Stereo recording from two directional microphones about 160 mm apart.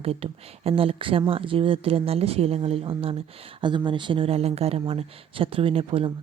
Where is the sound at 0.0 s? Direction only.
40° right (ahead or behind).